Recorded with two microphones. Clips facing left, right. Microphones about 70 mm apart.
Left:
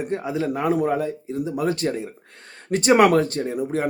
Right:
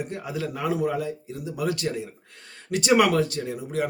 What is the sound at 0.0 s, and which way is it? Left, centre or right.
A man's voice, left.